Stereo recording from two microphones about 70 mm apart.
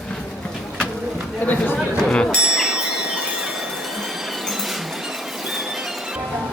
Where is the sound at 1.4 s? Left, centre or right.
Left.